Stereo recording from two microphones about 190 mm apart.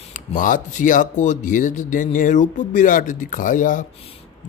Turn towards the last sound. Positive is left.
turn(degrees=45)  # may be behind; listen again after turning